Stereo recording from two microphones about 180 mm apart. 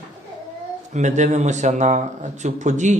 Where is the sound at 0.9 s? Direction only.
40° right (ahead or behind).